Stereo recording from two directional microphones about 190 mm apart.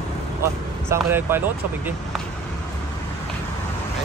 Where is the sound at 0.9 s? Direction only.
10° right (ahead or behind).